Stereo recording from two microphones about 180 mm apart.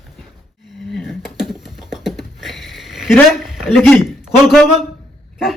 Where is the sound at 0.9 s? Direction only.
Centre (ahead or behind).